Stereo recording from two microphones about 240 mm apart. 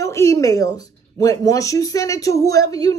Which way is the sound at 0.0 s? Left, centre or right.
Centre.